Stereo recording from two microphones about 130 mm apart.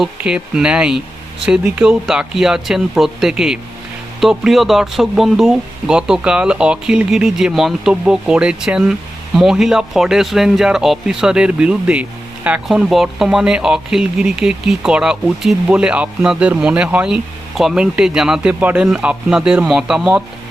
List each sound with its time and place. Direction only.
0.0 s speech: 10° right (ahead or behind)